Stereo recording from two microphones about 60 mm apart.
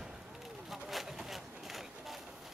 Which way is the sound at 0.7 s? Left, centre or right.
Centre.